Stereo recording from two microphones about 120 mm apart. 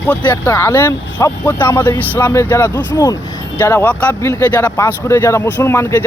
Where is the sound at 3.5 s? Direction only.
20° left (ahead or behind).